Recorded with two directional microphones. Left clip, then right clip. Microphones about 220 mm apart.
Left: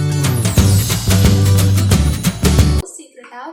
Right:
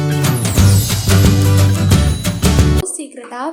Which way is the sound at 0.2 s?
Centre (ahead or behind).